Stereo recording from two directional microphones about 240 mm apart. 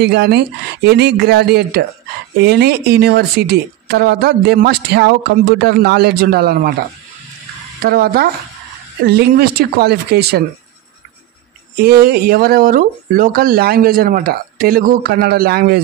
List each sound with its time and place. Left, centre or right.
0.0 s speech: right
7.8 s speech: right
11.8 s speech: right